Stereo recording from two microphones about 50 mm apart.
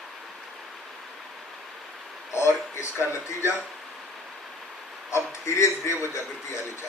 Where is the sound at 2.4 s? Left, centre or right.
Left.